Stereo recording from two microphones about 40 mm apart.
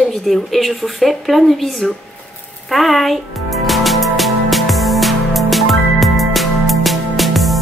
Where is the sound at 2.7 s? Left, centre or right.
Centre.